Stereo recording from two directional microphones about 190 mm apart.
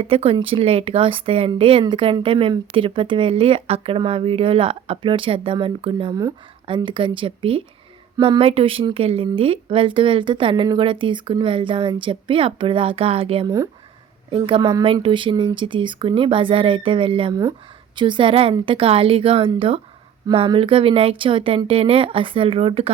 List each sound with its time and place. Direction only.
0.0 s speech: 30° right (ahead or behind)